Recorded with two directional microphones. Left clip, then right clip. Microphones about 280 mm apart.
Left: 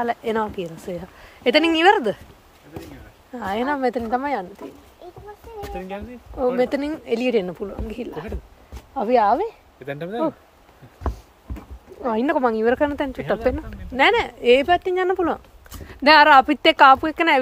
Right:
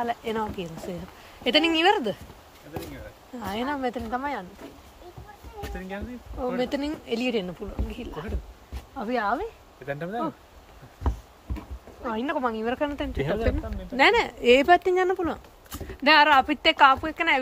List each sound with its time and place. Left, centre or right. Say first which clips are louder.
0.0 s speech: left 5 dB; centre
3.3 s speech: left 7 dB; centre
5.8 s speech: left 4 dB; left
6.6 s speech: left 6 dB; centre
9.8 s speech: left 5 dB; left
12.0 s speech: left 7 dB; left